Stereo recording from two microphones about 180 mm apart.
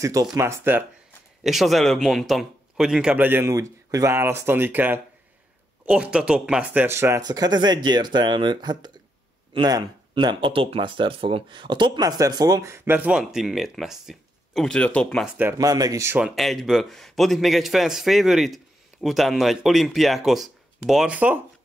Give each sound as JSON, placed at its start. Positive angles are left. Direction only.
{"t": 0.0, "sound": "speech", "side_deg": -20}
{"t": 1.4, "sound": "speech", "side_deg": 0}
{"t": 15.3, "sound": "speech", "side_deg": -15}